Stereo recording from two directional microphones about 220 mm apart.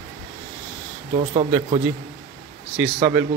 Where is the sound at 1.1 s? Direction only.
30° right (ahead or behind).